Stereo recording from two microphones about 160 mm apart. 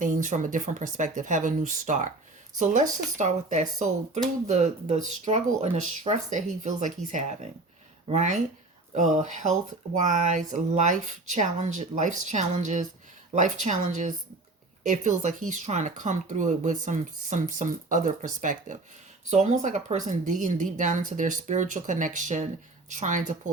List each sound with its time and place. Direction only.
0.0 s speech: 50° right (ahead or behind)